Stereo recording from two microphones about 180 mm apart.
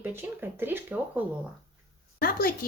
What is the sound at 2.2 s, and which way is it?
Speech, 55° left (ahead or behind).